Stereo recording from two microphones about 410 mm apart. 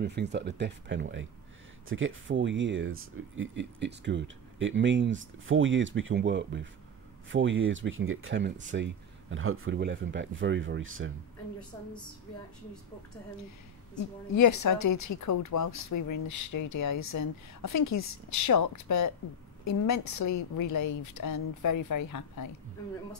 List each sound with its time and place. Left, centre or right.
0.0 s speech: right
14.3 s speech: left